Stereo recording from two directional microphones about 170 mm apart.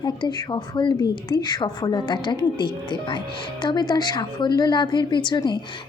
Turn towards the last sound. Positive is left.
turn(degrees=25)  # may be behind; listen again after turning